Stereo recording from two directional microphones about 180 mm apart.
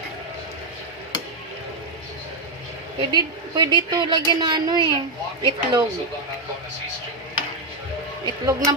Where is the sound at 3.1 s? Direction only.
25° right (ahead or behind).